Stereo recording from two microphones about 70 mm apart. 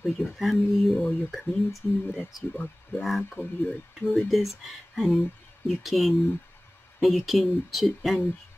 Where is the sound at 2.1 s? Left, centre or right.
Left.